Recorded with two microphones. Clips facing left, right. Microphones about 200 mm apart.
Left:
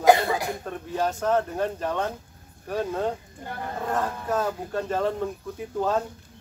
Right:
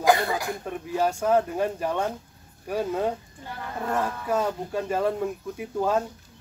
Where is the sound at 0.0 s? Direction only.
20° left (ahead or behind).